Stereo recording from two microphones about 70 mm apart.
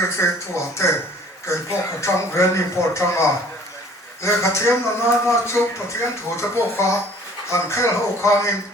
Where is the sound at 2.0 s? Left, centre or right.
Left.